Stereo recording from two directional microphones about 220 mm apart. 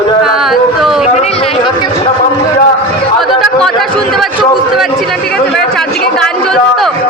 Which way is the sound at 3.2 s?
Centre (ahead or behind).